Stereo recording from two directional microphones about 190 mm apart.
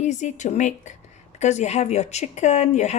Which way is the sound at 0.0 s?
40° left (ahead or behind).